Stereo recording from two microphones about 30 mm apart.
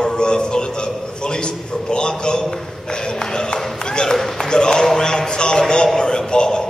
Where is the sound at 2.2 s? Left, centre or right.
Left.